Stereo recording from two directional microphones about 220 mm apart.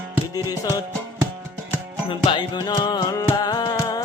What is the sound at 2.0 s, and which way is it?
Music, 20° left (ahead or behind).